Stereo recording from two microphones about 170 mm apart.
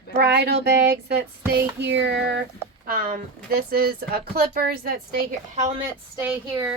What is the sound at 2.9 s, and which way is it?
Speech, 60° right (ahead or behind).